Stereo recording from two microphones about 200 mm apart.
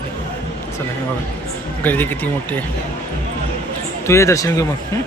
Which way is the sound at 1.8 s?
10° left (ahead or behind).